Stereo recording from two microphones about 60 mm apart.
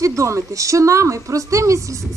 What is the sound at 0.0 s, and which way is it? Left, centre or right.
Speech, right.